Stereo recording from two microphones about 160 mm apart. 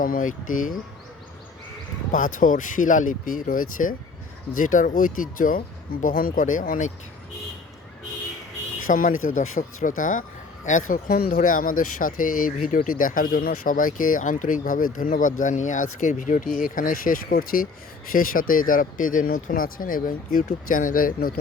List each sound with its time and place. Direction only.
0.0 s speech: 55° left (ahead or behind)
2.1 s speech: 55° left (ahead or behind)
8.9 s speech: 55° left (ahead or behind)
11.3 s speech: 50° left (ahead or behind)